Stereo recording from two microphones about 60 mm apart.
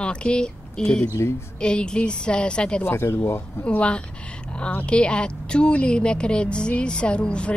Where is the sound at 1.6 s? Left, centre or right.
Centre.